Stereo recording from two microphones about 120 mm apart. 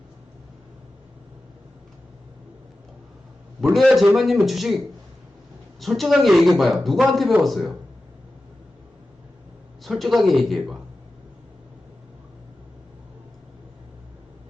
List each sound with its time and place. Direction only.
3.6 s a man's voice: centre (ahead or behind)
5.8 s a man's voice: centre (ahead or behind)
9.8 s a man's voice: centre (ahead or behind)